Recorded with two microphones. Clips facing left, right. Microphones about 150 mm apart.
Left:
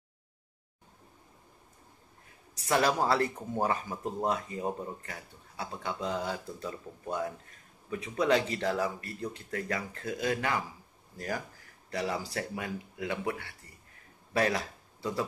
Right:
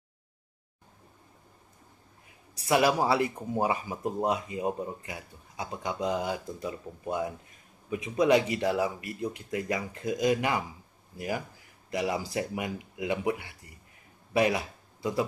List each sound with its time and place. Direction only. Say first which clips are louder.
2.5 s speech: right 3 dB; 10° right (ahead or behind)